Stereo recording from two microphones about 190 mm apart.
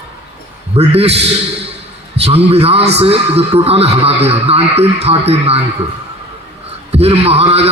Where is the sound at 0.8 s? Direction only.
30° right (ahead or behind).